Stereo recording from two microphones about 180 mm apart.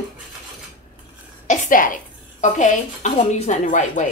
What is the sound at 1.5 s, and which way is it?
A woman's voice, 45° left (ahead or behind).